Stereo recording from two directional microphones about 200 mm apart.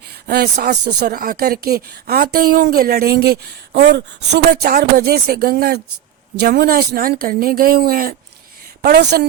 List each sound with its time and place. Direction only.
0.1 s speech: 50° right (ahead or behind)